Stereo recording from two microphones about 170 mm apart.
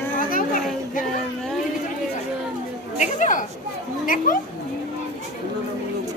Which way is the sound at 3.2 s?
50° left (ahead or behind).